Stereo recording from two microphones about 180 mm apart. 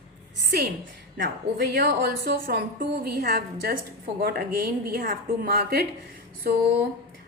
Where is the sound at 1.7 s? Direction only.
60° right (ahead or behind).